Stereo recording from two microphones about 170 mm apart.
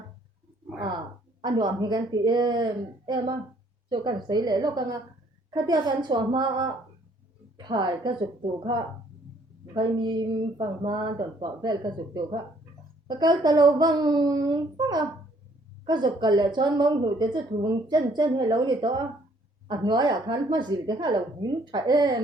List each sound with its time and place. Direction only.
1.4 s a woman's voice: 25° right (ahead or behind)
3.8 s a woman's voice: 25° right (ahead or behind)
9.7 s a woman's voice: 25° right (ahead or behind)